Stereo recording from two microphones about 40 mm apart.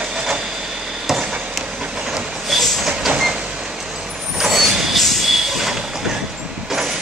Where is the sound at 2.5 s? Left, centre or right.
Centre.